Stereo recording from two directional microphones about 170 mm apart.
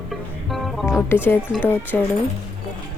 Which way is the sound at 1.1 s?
15° left (ahead or behind).